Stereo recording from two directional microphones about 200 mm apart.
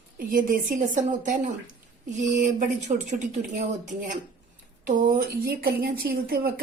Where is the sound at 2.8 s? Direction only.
35° right (ahead or behind).